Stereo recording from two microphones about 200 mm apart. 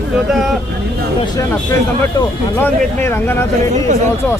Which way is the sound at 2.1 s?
10° left (ahead or behind).